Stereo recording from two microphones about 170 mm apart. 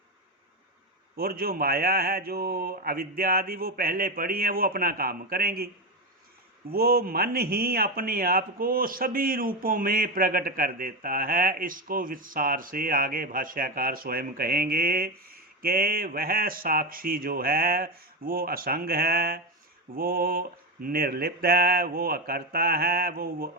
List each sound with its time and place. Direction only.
1.1 s speech: 60° right (ahead or behind)
6.7 s speech: 60° right (ahead or behind)